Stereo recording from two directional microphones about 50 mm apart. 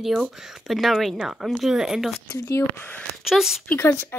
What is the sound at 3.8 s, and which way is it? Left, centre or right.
Speech, left.